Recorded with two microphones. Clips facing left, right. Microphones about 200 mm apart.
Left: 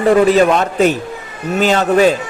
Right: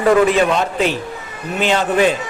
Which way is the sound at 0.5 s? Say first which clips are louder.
Left 4 dB; 45° left (ahead or behind).